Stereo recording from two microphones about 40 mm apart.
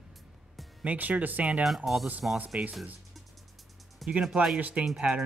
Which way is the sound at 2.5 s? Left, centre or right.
Right.